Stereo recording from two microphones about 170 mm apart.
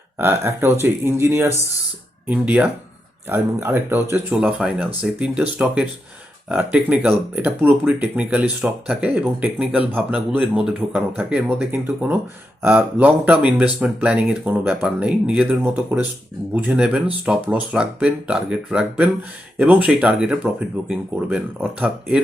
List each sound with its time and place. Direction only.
0.2 s speech: 15° right (ahead or behind)